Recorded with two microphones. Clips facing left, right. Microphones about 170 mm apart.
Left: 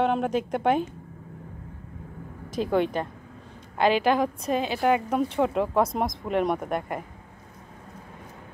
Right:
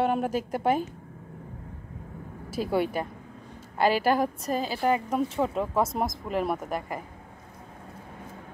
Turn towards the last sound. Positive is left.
turn(degrees=0)  # may be behind; listen again after turning